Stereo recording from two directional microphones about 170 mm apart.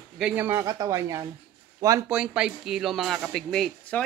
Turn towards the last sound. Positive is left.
turn(degrees=5)  # may be behind; listen again after turning